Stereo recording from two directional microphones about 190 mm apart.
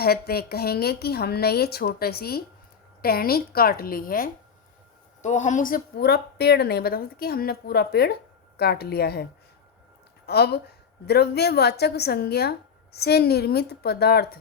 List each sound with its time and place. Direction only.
0.0 s a woman's voice: 55° left (ahead or behind)
10.2 s a woman's voice: 60° left (ahead or behind)